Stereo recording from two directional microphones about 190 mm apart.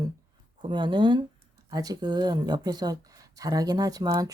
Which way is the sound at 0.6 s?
25° right (ahead or behind).